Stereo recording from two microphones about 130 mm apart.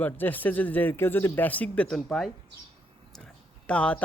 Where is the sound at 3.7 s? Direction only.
10° left (ahead or behind).